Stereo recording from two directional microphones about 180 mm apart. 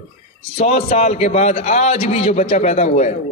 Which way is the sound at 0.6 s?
35° left (ahead or behind).